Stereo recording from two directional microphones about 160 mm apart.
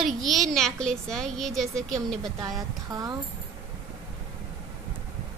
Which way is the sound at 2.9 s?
25° right (ahead or behind).